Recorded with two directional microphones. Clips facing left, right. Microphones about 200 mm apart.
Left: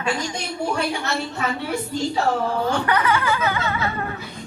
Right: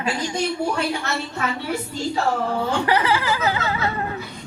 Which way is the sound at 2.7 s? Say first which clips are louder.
Right 1 dB; 25° right (ahead or behind).